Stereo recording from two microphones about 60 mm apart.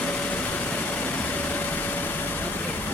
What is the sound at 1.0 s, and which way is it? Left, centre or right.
Vehicle, left.